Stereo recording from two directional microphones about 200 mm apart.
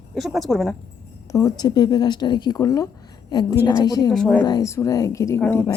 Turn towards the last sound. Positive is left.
turn(degrees=10)  # may be behind; listen again after turning